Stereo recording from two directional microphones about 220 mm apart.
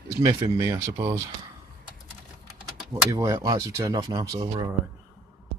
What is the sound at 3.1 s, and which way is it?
Speech, 15° right (ahead or behind).